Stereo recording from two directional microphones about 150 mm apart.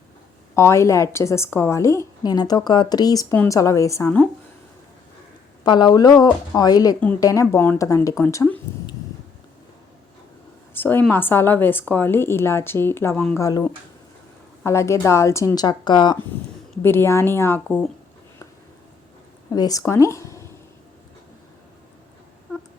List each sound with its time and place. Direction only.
0.5 s a woman's voice: 20° left (ahead or behind)
5.6 s a woman's voice: 30° left (ahead or behind)
10.8 s a sound: 15° left (ahead or behind)
11.1 s a woman's voice: 15° left (ahead or behind); by 16.1 s 30° left (ahead or behind)
16.8 s a woman's voice: 15° left (ahead or behind)
19.5 s speech: 25° left (ahead or behind)